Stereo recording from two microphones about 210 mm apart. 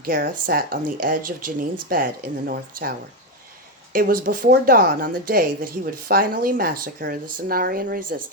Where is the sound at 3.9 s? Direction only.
45° right (ahead or behind).